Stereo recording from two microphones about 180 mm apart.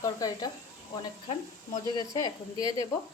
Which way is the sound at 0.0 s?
20° left (ahead or behind).